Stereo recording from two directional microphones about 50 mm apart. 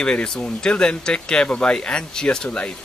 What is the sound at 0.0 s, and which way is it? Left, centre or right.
Speech, centre.